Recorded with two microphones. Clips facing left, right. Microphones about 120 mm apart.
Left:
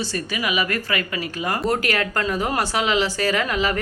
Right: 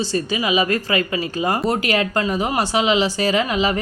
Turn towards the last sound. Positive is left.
turn(degrees=-20)  # may be behind; listen again after turning